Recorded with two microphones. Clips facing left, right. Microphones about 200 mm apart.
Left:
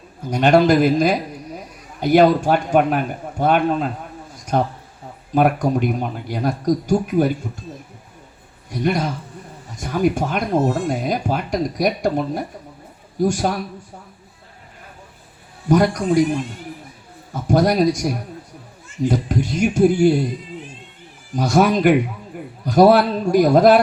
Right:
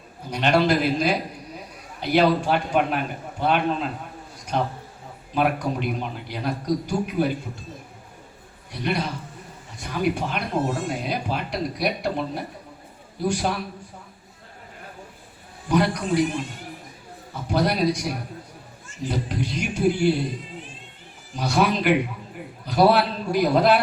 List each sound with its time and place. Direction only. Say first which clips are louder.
0.3 s speech: left 6 dB; 45° left (ahead or behind)
8.7 s speech: left 6 dB; 45° left (ahead or behind)
15.7 s speech: left 6 dB; 45° left (ahead or behind)
17.3 s speech: left 7 dB; 45° left (ahead or behind)
21.3 s speech: left 6 dB; 45° left (ahead or behind)